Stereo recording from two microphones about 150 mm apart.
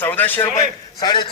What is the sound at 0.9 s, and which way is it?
Speech, 30° left (ahead or behind).